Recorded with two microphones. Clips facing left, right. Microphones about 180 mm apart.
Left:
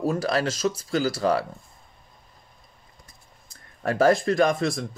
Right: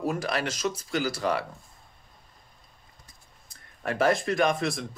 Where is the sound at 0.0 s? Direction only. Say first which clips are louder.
Left 5 dB; 30° left (ahead or behind).